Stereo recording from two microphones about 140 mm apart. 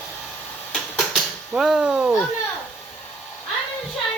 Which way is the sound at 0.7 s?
Centre (ahead or behind).